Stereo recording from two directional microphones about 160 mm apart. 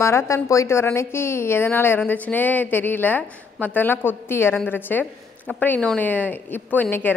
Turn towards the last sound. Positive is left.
turn(degrees=10)  # may be behind; listen again after turning